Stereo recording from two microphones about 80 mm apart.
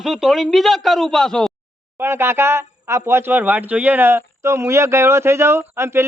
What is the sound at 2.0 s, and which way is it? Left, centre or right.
Speech, right.